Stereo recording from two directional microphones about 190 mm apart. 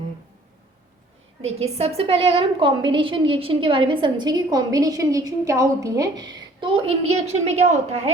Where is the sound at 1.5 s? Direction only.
35° right (ahead or behind).